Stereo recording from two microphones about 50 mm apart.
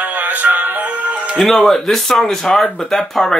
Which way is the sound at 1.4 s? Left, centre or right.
Centre.